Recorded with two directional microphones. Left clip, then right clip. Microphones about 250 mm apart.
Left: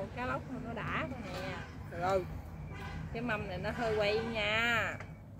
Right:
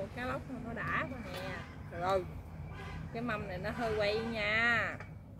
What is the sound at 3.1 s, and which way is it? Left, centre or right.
Speech, centre.